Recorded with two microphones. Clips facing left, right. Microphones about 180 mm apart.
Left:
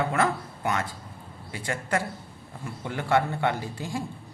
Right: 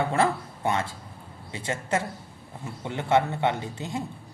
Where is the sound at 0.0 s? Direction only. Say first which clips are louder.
Right 1 dB; 30° right (ahead or behind).